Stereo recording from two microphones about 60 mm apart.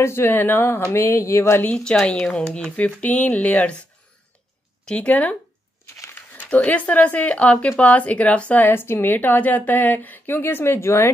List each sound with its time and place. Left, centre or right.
0.0 s a woman's voice: left
0.9 s speech: left
1.9 s speech: centre
4.8 s speech: left
6.5 s a woman's voice: left